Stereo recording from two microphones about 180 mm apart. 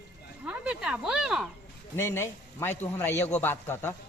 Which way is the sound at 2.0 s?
15° left (ahead or behind).